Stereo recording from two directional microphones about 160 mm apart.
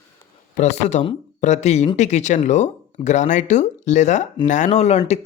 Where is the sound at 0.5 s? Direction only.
45° left (ahead or behind).